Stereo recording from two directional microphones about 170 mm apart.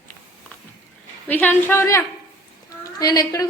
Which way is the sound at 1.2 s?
10° left (ahead or behind).